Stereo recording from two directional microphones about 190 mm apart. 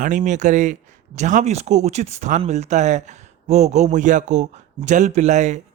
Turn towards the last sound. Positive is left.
turn(degrees=-40)  # may be behind; listen again after turning